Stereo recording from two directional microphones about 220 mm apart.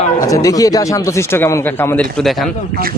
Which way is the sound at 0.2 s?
15° left (ahead or behind).